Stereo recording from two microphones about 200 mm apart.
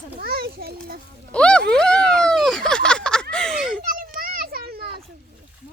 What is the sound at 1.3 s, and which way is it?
Speech, 5° left (ahead or behind).